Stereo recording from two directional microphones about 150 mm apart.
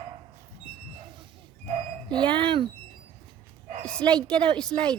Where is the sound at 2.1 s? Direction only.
30° right (ahead or behind).